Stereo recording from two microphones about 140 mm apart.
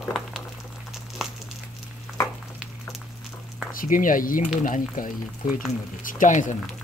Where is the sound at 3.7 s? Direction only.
80° left.